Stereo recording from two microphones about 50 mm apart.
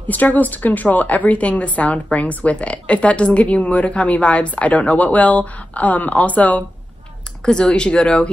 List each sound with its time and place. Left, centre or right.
0.1 s a woman's voice: left
7.4 s speech: centre